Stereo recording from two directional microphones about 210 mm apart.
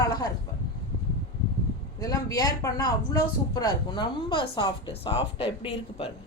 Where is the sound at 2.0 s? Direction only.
15° left (ahead or behind).